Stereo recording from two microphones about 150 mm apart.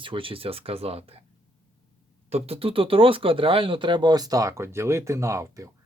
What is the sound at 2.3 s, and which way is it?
Speech, 40° right (ahead or behind).